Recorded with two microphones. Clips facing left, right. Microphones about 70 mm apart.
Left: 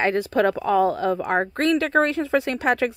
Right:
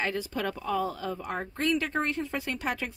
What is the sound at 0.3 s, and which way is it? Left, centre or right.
A woman's voice, left.